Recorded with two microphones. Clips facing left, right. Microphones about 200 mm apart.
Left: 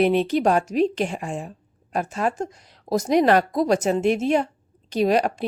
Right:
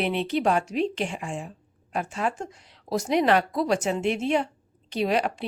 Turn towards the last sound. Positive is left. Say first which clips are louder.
# left 5 dB
turn(degrees=40)  # may be behind; listen again after turning